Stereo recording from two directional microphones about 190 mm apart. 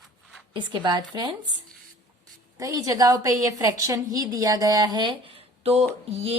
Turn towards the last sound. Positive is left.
turn(degrees=-35)  # may be behind; listen again after turning